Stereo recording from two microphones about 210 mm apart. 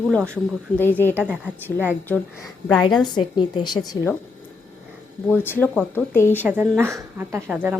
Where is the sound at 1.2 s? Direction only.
10° right (ahead or behind).